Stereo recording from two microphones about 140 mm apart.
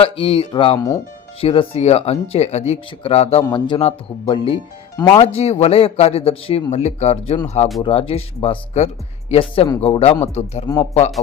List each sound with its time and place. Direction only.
0.0 s speech: 40° left (ahead or behind)
0.8 s speech: 25° left (ahead or behind)
1.4 s a man's voice: 45° left (ahead or behind)